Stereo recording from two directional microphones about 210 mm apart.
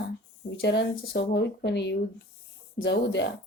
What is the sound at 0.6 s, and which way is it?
Speech, 50° left (ahead or behind).